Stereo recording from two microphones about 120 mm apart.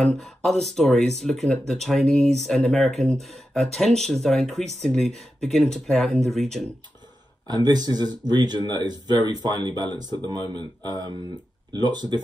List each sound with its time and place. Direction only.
0.0 s speech: centre (ahead or behind)
7.4 s speech: 35° right (ahead or behind)